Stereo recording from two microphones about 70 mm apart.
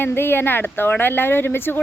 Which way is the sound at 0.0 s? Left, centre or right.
Left.